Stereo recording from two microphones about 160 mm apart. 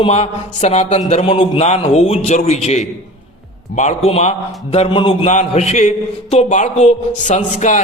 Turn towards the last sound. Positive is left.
turn(degrees=50)  # may be behind; listen again after turning